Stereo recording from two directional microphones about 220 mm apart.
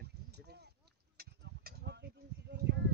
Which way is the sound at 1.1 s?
45° right (ahead or behind).